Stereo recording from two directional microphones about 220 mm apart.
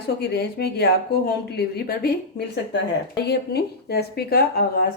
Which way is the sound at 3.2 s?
45° left (ahead or behind).